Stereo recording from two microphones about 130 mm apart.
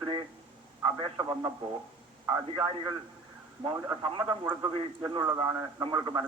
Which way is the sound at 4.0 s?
40° right (ahead or behind).